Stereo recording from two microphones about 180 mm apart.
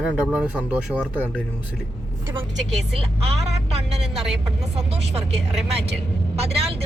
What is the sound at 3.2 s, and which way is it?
Speech, 35° right (ahead or behind).